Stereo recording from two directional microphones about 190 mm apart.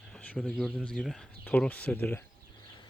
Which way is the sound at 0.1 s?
5° left (ahead or behind).